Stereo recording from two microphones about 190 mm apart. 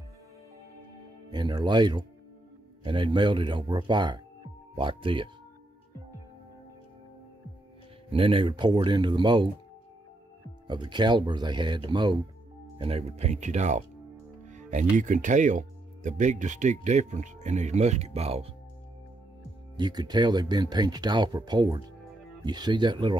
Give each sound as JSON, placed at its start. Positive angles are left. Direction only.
{"t": 1.3, "sound": "speech", "side_deg": -20}
{"t": 8.1, "sound": "speech", "side_deg": -30}
{"t": 10.7, "sound": "speech", "side_deg": -25}
{"t": 19.8, "sound": "speech", "side_deg": -20}